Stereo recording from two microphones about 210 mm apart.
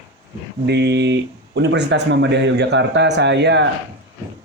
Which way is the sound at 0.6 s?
55° right (ahead or behind).